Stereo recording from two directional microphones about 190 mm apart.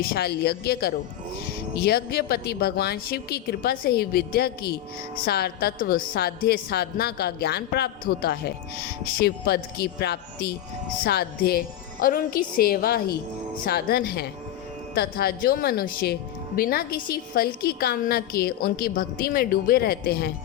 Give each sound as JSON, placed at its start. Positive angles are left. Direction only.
{"t": 0.0, "sound": "a woman's voice", "side_deg": 55}